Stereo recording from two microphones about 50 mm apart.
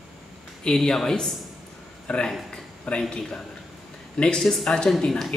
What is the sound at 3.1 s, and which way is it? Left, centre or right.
Speech, centre.